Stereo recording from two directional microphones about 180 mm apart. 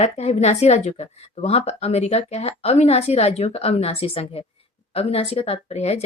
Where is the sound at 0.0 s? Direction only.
35° left (ahead or behind).